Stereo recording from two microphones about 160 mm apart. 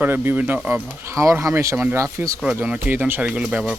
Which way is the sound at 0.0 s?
10° right (ahead or behind).